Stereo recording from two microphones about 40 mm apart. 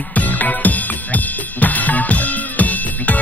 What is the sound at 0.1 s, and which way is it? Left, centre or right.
Drum kit, left.